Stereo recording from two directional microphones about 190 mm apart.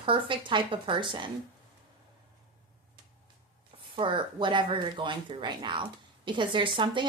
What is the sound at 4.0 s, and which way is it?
Speech, 25° right (ahead or behind).